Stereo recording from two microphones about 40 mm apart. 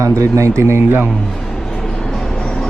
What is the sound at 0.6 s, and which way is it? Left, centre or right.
Speech, right.